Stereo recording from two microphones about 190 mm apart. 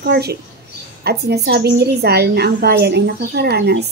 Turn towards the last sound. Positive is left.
turn(degrees=-60)  # may be behind; listen again after turning